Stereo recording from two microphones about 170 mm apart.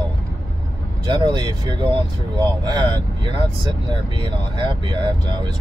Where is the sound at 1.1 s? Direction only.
25° right (ahead or behind).